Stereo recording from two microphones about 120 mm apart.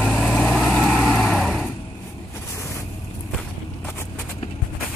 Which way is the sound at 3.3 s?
20° left (ahead or behind).